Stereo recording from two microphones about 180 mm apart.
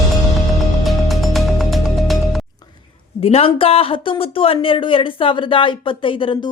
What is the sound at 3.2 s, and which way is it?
A woman's voice, 35° left (ahead or behind).